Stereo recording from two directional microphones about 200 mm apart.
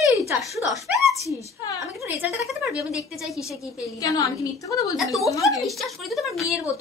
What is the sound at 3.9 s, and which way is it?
A woman's voice, 15° left (ahead or behind).